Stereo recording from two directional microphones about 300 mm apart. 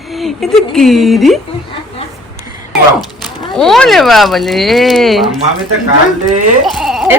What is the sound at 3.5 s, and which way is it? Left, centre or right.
A woman's voice, centre.